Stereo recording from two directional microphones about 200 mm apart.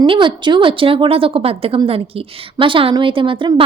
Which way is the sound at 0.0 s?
25° right (ahead or behind).